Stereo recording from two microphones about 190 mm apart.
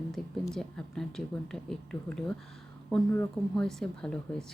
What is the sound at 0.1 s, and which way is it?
Speech, centre (ahead or behind).